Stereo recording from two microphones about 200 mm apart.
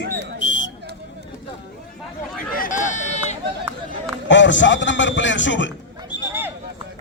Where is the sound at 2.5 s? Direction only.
40° left (ahead or behind).